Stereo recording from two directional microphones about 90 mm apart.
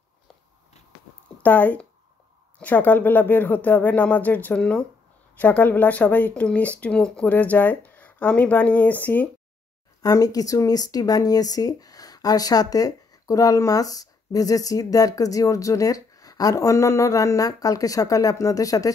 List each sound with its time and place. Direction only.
1.4 s speech: 20° left (ahead or behind)
10.0 s speech: 45° left (ahead or behind)